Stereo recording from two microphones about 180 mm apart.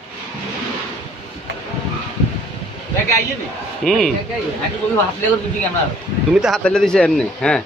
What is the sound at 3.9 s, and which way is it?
Speech, centre (ahead or behind).